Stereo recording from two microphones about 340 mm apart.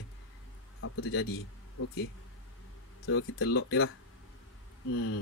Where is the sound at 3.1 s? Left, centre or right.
Left.